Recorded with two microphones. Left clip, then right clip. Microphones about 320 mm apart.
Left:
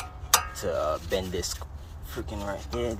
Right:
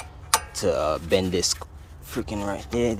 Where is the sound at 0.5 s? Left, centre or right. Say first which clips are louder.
Right 5 dB; right.